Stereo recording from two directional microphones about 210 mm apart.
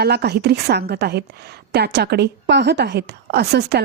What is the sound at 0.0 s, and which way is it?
A woman's voice, 50° right (ahead or behind).